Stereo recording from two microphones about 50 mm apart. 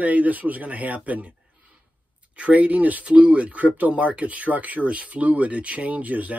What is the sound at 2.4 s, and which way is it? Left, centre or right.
Speech, right.